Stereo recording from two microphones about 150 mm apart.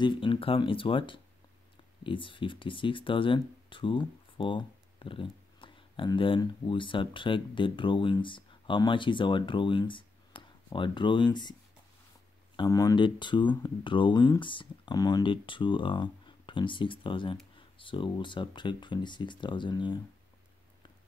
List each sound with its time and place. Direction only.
0.0 s speech: 35° left (ahead or behind)
12.5 s speech: 25° left (ahead or behind)